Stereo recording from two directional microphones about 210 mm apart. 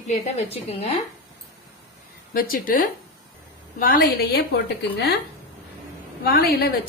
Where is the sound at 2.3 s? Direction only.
45° left (ahead or behind).